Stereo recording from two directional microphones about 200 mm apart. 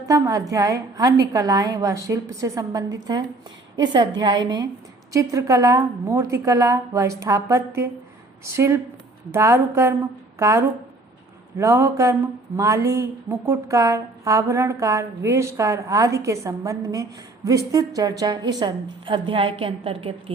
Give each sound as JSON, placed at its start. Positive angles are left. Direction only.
{"t": 0.1, "sound": "a woman's voice", "side_deg": -15}